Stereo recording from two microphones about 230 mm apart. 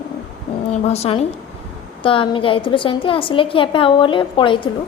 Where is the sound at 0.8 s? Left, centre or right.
Left.